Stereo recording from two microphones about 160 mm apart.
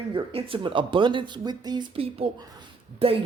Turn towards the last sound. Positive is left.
turn(degrees=-35)  # may be behind; listen again after turning